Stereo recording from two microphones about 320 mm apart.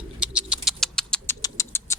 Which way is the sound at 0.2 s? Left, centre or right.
Centre.